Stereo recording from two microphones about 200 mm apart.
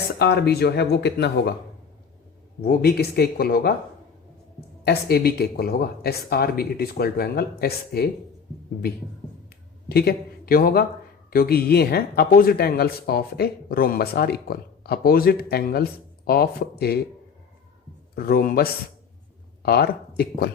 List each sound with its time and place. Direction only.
0.2 s speech: 55° left (ahead or behind)
2.6 s speech: 50° left (ahead or behind)
4.8 s speech: 55° left (ahead or behind)
9.9 s a man's voice: 50° left (ahead or behind)
18.1 s speech: 45° left (ahead or behind)